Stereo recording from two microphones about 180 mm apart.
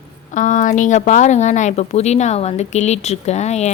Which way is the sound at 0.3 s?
45° left (ahead or behind).